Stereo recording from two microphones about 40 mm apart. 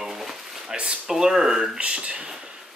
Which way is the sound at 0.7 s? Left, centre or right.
Right.